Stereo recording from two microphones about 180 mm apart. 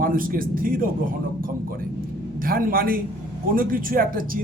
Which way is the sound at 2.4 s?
55° right (ahead or behind).